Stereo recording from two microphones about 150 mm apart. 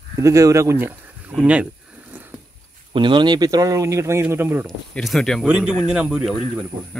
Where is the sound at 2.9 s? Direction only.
30° right (ahead or behind); by 4.7 s 15° right (ahead or behind).